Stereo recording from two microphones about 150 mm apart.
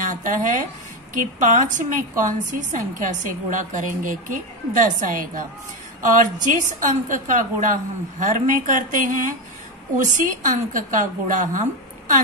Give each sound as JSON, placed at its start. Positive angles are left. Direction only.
{"t": 0.0, "sound": "a woman's voice", "side_deg": -60}